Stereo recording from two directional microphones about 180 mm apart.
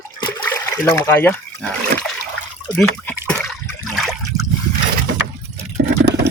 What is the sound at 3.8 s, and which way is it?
Water, centre (ahead or behind).